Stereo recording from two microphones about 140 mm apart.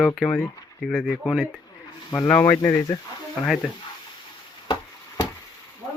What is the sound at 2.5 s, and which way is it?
Speech, 25° left (ahead or behind).